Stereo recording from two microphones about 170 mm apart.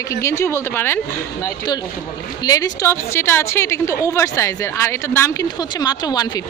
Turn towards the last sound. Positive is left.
turn(degrees=25)  # may be behind; listen again after turning